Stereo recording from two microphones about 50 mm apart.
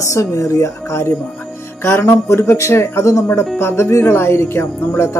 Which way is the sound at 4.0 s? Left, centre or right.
Left.